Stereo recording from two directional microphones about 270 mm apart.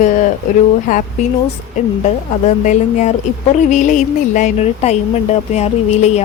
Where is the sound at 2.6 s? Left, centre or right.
Left.